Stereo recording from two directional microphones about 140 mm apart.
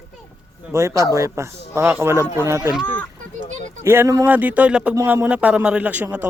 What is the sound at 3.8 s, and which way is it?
Speech, 20° right (ahead or behind).